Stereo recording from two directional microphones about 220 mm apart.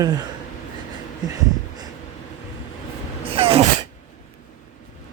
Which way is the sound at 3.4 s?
25° right (ahead or behind).